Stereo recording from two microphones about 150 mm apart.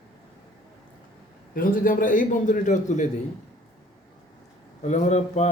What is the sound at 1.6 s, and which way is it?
Speech, 65° left (ahead or behind).